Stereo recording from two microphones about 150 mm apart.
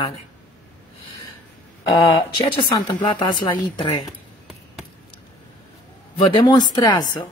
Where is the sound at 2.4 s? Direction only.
30° left (ahead or behind).